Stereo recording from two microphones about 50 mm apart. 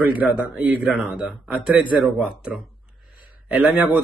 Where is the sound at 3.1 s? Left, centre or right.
Right.